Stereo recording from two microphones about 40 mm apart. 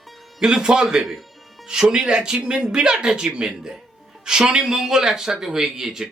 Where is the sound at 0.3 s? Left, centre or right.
Centre.